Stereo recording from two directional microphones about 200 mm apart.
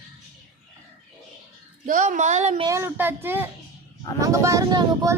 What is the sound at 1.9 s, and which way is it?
Speech, 40° right (ahead or behind).